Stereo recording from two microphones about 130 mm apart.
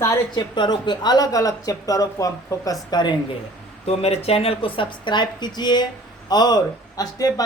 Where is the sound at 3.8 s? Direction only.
55° left (ahead or behind).